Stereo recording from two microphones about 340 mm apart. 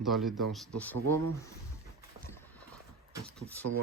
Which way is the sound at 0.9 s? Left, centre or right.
Right.